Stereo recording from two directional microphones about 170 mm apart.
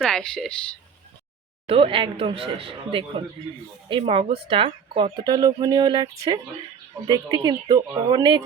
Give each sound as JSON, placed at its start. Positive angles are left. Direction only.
{"t": 0.0, "sound": "speech", "side_deg": 5}
{"t": 1.6, "sound": "speech", "side_deg": -35}